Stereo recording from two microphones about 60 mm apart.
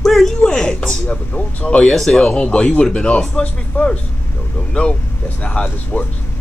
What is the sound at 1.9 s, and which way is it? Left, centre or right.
A woman's voice, centre.